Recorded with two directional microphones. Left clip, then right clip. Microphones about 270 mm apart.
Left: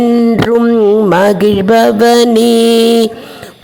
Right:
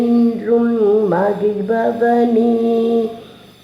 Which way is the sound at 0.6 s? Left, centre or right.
Left.